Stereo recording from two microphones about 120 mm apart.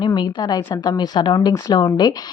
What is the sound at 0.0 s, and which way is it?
Speech, 40° left (ahead or behind).